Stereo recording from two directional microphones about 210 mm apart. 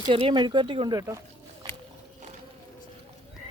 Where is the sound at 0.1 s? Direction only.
25° right (ahead or behind).